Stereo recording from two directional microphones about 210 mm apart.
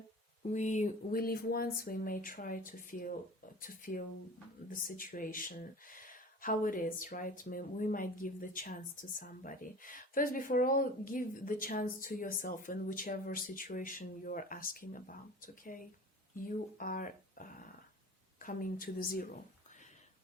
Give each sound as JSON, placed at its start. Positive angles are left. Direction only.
{"t": 0.4, "sound": "speech", "side_deg": 35}